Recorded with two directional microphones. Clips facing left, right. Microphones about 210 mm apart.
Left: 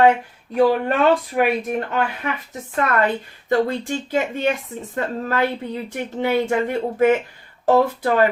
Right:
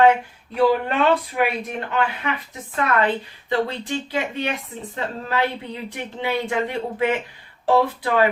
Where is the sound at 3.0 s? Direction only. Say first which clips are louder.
Left 1 dB; 45° left (ahead or behind).